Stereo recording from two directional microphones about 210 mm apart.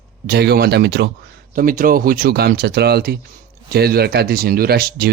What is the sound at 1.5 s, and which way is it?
Speech, 40° right (ahead or behind).